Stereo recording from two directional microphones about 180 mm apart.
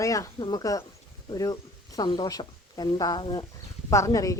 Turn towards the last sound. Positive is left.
turn(degrees=20)  # may be behind; listen again after turning